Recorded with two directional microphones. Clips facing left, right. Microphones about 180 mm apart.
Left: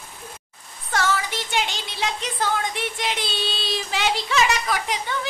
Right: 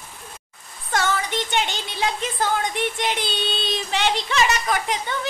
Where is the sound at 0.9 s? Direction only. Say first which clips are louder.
Right 1 dB; 5° left (ahead or behind).